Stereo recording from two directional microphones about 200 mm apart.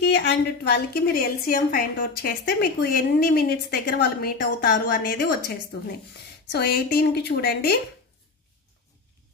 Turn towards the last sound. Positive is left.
turn(degrees=50)  # may be behind; listen again after turning